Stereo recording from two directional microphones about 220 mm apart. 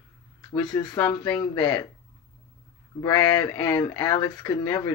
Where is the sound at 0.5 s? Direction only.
20° left (ahead or behind).